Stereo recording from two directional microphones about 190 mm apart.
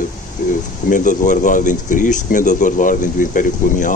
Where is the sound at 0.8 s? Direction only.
45° left (ahead or behind).